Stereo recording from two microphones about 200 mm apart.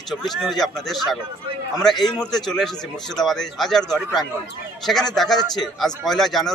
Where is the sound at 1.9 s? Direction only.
20° left (ahead or behind).